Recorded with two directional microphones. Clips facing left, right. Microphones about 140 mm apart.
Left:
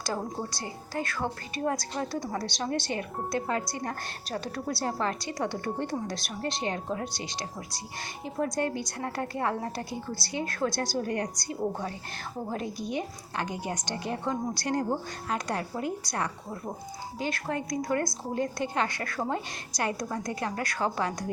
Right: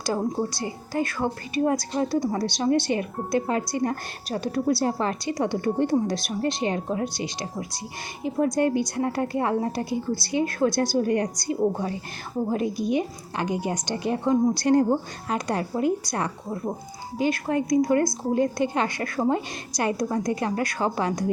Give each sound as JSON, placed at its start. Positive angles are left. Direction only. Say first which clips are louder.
{"t": 0.0, "sound": "a woman's voice", "louder": "right 7 dB", "side_deg": -15}
{"t": 8.5, "sound": "a woman's voice", "louder": "right 8 dB", "side_deg": -15}
{"t": 17.2, "sound": "a woman's voice", "louder": "right 8 dB", "side_deg": -10}